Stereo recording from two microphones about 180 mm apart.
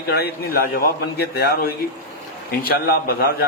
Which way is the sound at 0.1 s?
60° left (ahead or behind).